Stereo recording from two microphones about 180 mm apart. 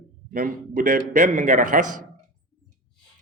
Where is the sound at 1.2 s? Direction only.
40° right (ahead or behind).